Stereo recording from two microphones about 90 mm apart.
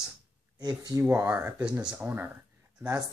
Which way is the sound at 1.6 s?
10° right (ahead or behind).